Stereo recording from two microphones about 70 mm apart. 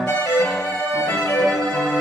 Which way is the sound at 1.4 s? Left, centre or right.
Centre.